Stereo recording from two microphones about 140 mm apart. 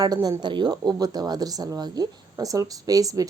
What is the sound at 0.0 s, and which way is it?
Speech, 30° right (ahead or behind).